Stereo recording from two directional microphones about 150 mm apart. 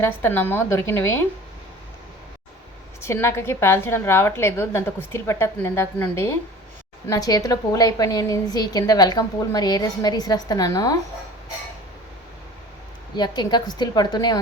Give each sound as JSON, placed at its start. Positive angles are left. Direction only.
{"t": 0.0, "sound": "a woman's voice", "side_deg": 15}
{"t": 3.0, "sound": "a woman's voice", "side_deg": 15}
{"t": 13.1, "sound": "a woman's voice", "side_deg": 30}